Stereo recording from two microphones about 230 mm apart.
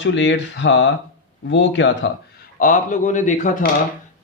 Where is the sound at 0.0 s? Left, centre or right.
Left.